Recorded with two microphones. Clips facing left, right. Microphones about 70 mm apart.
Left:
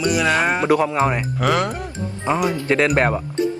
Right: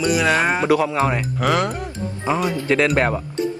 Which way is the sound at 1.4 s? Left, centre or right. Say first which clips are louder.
Even; centre.